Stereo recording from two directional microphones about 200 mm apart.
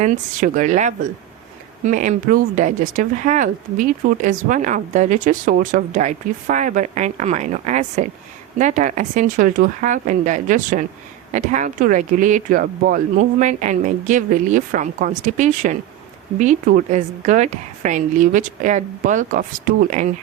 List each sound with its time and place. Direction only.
0.0 s speech: 40° right (ahead or behind)